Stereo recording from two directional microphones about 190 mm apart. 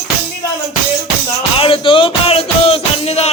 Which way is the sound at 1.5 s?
30° left (ahead or behind).